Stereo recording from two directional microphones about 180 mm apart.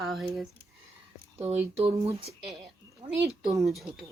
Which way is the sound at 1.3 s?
35° right (ahead or behind).